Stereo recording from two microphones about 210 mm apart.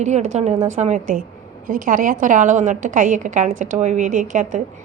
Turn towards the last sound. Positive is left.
turn(degrees=-40)  # may be behind; listen again after turning